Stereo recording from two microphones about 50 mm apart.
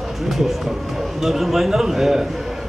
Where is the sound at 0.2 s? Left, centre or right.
Centre.